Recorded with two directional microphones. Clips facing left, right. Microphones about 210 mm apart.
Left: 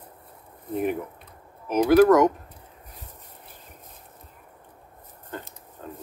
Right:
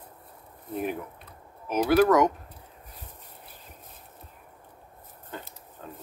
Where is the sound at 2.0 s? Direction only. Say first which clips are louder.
Left 4 dB; 5° left (ahead or behind).